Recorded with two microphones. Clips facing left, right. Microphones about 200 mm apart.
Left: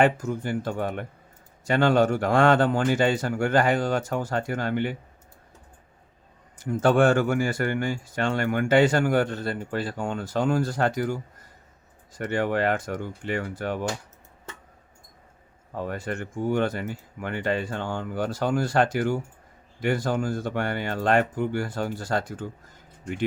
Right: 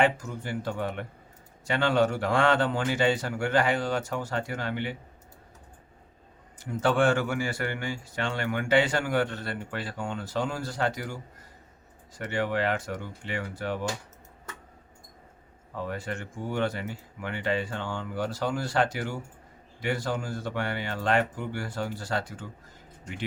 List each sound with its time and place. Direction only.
0.0 s speech: 50° left (ahead or behind)
6.6 s speech: 45° left (ahead or behind)
12.2 s speech: 45° left (ahead or behind)
15.7 s speech: 50° left (ahead or behind)